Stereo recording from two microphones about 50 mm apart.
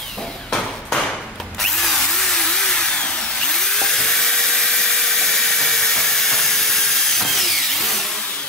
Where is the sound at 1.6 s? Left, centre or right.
Centre.